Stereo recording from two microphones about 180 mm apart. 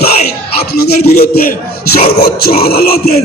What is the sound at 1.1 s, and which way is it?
A man's voice, 55° left (ahead or behind).